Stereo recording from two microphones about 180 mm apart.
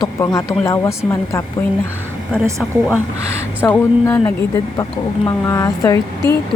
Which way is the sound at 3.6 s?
15° left (ahead or behind).